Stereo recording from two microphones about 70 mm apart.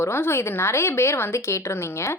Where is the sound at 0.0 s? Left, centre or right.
Left.